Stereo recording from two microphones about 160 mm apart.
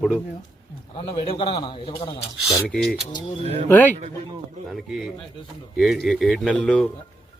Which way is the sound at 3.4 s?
40° right (ahead or behind).